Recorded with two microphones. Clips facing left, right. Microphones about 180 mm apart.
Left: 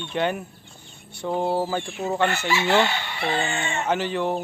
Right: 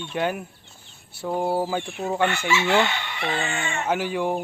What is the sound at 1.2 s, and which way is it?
Speech, 10° right (ahead or behind).